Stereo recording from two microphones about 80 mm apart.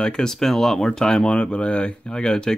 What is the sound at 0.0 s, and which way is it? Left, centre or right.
Speech, centre.